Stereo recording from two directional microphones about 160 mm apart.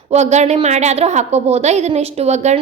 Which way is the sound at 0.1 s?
45° right (ahead or behind).